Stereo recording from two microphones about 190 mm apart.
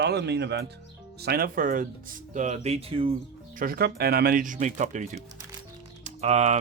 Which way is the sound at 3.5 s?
50° right (ahead or behind).